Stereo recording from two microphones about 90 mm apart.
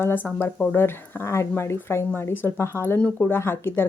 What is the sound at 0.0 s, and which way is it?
A woman's voice, 20° left (ahead or behind).